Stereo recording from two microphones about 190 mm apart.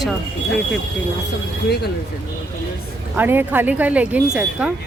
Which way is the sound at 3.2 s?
10° right (ahead or behind).